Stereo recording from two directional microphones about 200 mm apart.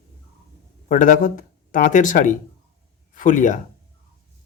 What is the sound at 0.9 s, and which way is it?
Speech, 40° left (ahead or behind).